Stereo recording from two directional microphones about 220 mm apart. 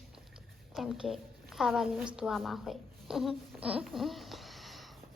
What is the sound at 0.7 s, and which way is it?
A woman's voice, centre (ahead or behind).